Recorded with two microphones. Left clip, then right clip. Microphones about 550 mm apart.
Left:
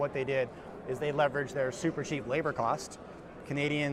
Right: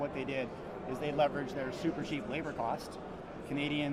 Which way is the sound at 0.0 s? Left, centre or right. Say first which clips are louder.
Left 6 dB; left.